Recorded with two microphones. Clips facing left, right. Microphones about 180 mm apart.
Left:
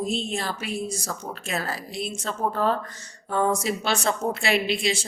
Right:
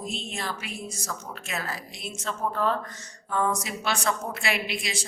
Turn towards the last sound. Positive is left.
turn(degrees=25)  # may be behind; listen again after turning